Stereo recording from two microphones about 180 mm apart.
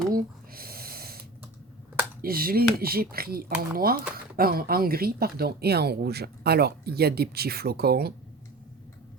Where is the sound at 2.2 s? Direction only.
55° right (ahead or behind).